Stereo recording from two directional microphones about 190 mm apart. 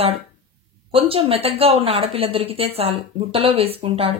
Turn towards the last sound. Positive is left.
turn(degrees=-30)  # may be behind; listen again after turning